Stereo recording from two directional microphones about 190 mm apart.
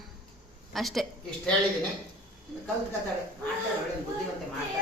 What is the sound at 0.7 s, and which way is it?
Speech, centre (ahead or behind).